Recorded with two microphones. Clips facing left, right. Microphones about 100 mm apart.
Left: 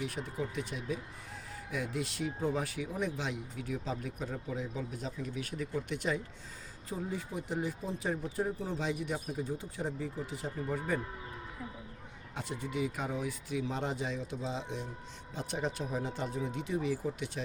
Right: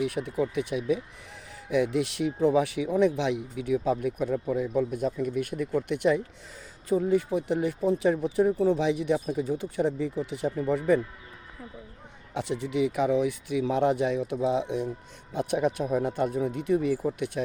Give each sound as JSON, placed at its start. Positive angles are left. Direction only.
{"t": 0.0, "sound": "speech", "side_deg": -60}
{"t": 6.8, "sound": "speech", "side_deg": -75}
{"t": 12.3, "sound": "speech", "side_deg": -75}